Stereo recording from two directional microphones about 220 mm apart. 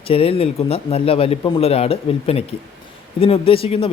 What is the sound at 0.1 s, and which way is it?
Speech, 25° left (ahead or behind).